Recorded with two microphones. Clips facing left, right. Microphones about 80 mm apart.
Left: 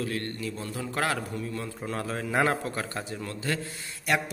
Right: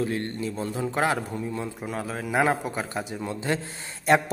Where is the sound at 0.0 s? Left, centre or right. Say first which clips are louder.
Right 4 dB; right.